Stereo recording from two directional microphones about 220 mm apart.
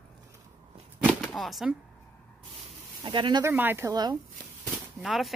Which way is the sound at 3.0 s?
20° right (ahead or behind).